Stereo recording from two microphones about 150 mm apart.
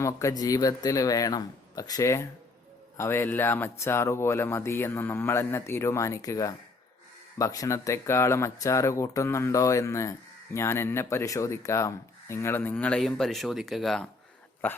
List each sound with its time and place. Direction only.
0.0 s speech: 20° left (ahead or behind)